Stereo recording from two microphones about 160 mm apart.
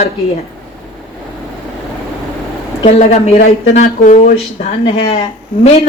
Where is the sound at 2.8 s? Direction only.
45° left (ahead or behind).